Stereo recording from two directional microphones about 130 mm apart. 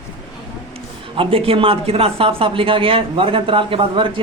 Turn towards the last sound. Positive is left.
turn(degrees=-40)  # may be behind; listen again after turning